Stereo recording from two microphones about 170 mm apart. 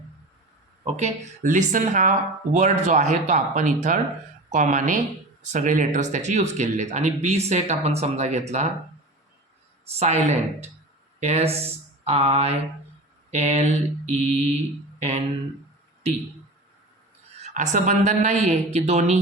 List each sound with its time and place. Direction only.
0.9 s speech: 40° right (ahead or behind)
8.0 s mantra: 40° right (ahead or behind)
10.0 s mantra: 40° right (ahead or behind)
14.9 s a sound: 40° right (ahead or behind)
17.4 s speech: 45° right (ahead or behind)